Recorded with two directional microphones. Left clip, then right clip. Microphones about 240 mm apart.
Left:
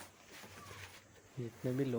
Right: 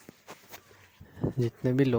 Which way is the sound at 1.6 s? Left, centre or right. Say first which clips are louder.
Right 10 dB; right.